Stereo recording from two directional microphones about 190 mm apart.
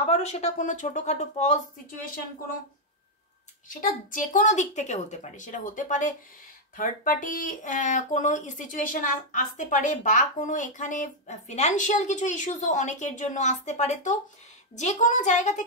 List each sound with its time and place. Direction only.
0.0 s speech: 35° left (ahead or behind)
3.6 s speech: 45° left (ahead or behind)